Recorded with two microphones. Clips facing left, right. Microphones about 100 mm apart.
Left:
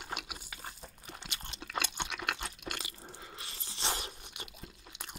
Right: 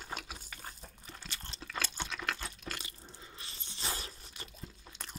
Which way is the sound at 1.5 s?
60° left (ahead or behind).